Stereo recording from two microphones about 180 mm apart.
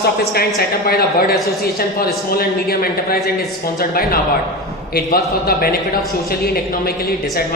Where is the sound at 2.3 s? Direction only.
55° left (ahead or behind).